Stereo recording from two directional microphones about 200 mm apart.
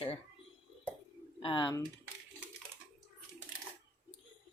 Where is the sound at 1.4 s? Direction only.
25° left (ahead or behind).